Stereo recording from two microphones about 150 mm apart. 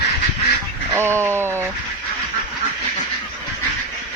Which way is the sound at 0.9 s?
15° right (ahead or behind).